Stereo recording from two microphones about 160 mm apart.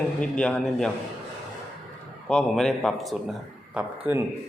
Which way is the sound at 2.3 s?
5° left (ahead or behind).